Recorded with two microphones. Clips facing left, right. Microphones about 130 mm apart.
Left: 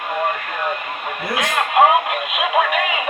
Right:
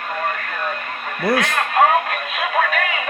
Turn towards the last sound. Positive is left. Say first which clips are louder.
# left 2 dB
turn(degrees=15)  # may be behind; listen again after turning